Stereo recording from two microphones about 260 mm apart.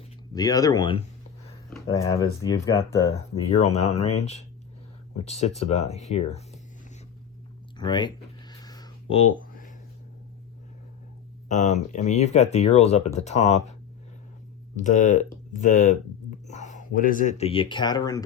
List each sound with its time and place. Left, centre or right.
0.3 s speech: centre
3.5 s speech: left
7.8 s a sound: centre
11.4 s speech: left
14.8 s speech: left